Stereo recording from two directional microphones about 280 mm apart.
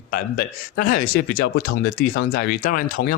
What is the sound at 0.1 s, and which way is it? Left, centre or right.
Speech, left.